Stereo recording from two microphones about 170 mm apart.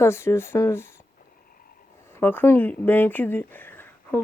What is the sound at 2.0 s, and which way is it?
Speech, 15° left (ahead or behind).